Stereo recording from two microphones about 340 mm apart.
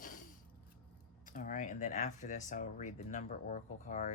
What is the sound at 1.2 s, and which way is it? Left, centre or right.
Speech, left.